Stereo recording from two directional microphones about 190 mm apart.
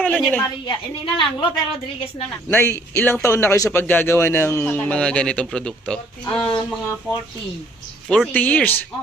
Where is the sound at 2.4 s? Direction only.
10° left (ahead or behind).